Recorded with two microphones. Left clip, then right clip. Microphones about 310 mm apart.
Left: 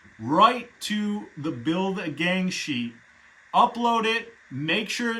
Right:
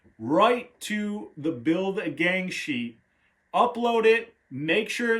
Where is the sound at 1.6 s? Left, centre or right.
Centre.